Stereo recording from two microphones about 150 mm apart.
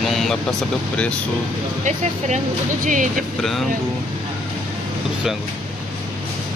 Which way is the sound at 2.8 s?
60° right (ahead or behind).